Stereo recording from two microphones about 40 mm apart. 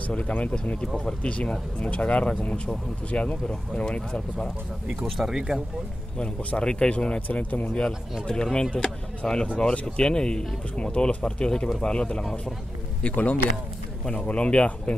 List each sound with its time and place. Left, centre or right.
0.1 s speech: left
5.2 s speech: centre
6.1 s speech: left
7.2 s speech: left
7.7 s speech: centre
11.2 s speech: left
13.0 s speech: left
14.2 s speech: left